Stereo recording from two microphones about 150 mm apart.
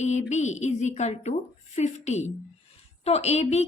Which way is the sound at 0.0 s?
50° left (ahead or behind).